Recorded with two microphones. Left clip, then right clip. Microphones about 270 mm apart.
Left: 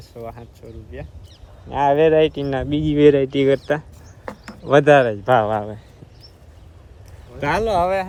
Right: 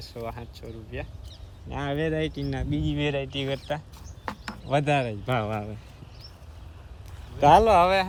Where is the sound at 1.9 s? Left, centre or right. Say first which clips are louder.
Left 14 dB; centre.